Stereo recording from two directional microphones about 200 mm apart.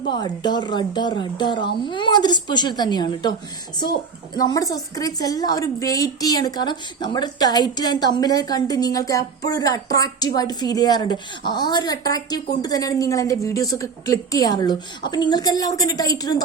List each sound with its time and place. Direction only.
0.1 s a woman's voice: 20° left (ahead or behind)
4.4 s a woman's voice: 20° left (ahead or behind)